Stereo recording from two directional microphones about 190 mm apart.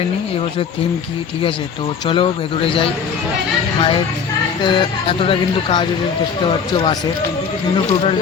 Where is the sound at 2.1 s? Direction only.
30° left (ahead or behind).